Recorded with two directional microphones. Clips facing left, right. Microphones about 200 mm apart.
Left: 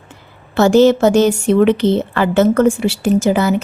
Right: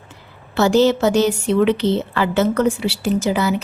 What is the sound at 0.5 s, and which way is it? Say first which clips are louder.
A woman's voice: left 5 dB; 50° left (ahead or behind).